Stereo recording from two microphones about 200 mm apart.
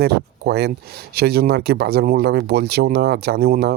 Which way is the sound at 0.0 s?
55° right (ahead or behind).